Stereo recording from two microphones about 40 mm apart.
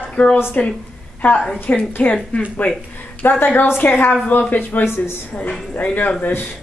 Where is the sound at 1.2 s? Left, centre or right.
Left.